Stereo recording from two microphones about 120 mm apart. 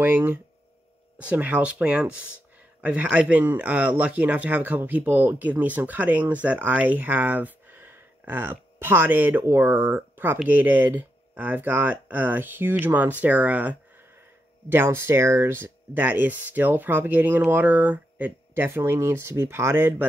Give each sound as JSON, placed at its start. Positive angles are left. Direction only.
{"t": 0.0, "sound": "speech", "side_deg": -15}